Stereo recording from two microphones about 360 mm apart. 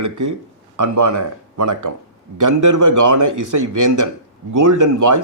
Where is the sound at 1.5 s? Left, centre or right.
Right.